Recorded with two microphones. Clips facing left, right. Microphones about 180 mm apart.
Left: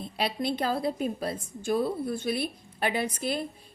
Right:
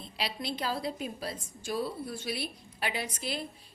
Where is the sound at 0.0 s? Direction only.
55° left (ahead or behind).